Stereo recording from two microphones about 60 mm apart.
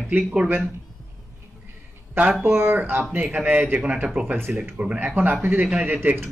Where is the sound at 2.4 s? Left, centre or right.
Right.